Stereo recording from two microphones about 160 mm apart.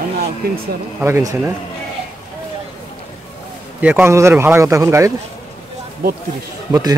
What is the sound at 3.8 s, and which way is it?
Speech, 10° right (ahead or behind).